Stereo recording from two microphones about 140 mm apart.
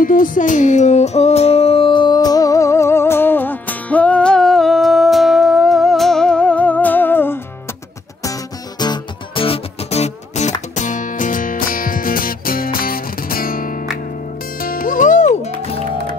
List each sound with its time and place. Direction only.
0.0 s music: 75° left (ahead or behind); by 7.3 s 15° left (ahead or behind)
8.2 s music: 25° left (ahead or behind); by 10.5 s 50° left (ahead or behind)
10.8 s music: 65° left (ahead or behind)